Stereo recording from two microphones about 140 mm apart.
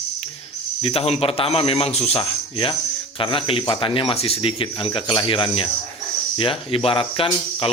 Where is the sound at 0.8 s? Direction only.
40° left (ahead or behind).